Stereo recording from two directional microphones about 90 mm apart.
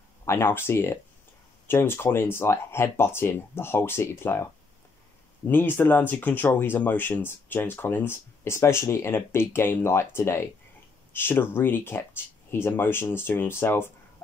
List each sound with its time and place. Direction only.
0.2 s speech: 30° left (ahead or behind)
5.5 s speech: 25° left (ahead or behind)